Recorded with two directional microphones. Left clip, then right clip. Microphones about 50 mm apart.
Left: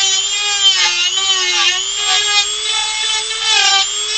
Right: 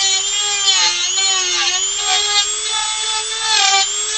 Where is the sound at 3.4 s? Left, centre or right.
Centre.